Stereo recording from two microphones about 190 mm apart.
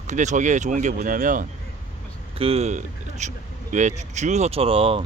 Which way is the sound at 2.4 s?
30° right (ahead or behind).